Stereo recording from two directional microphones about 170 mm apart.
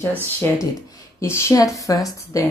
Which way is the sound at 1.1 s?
15° left (ahead or behind).